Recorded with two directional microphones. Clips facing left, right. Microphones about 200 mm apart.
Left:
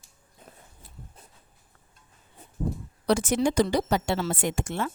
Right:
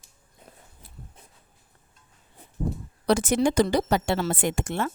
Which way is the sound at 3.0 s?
70° right (ahead or behind).